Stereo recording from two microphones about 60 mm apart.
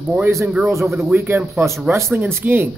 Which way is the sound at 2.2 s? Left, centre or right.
Right.